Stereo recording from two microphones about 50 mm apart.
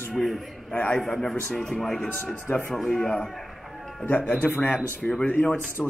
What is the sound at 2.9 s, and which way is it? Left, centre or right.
Speech, centre.